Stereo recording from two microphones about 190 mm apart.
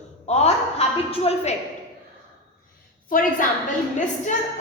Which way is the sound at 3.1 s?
45° left (ahead or behind).